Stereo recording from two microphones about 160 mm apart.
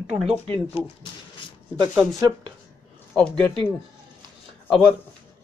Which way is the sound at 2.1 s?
25° right (ahead or behind).